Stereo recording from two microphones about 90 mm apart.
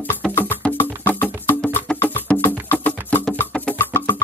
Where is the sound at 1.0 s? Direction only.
20° left (ahead or behind).